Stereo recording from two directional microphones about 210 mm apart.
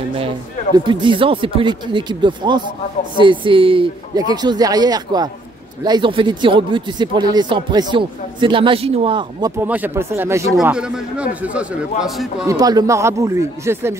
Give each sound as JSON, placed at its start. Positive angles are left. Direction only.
{"t": 0.7, "sound": "speech", "side_deg": -25}
{"t": 9.6, "sound": "a man's voice", "side_deg": -10}
{"t": 12.4, "sound": "speech", "side_deg": -20}